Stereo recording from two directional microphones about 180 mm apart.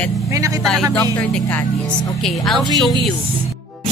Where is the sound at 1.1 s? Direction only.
10° left (ahead or behind).